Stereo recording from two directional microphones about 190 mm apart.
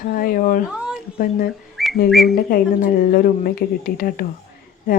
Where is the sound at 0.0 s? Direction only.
50° left (ahead or behind).